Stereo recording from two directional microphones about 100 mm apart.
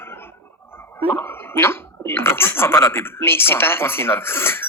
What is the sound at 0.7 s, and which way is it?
Speech, 20° left (ahead or behind).